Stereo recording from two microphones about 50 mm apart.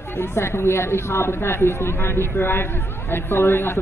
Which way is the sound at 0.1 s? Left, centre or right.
Left.